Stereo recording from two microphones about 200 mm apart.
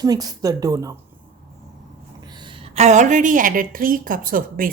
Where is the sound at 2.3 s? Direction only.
25° right (ahead or behind).